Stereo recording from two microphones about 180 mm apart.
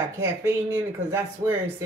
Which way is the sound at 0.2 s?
15° right (ahead or behind).